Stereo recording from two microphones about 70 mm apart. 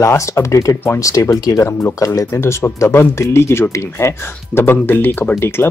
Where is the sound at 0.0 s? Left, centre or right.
Left.